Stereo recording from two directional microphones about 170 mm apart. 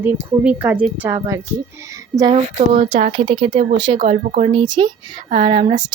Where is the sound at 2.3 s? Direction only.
40° right (ahead or behind).